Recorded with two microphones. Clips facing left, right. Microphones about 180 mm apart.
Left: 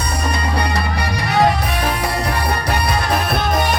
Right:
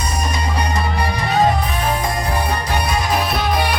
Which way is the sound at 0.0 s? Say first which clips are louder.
Left 1 dB; 65° left (ahead or behind).